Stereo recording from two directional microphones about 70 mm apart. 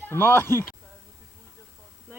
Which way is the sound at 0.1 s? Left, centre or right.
Left.